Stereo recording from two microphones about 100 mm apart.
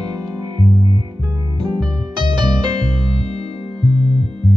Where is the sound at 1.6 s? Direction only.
50° right (ahead or behind).